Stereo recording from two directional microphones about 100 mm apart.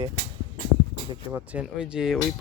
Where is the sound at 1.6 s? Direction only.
5° right (ahead or behind).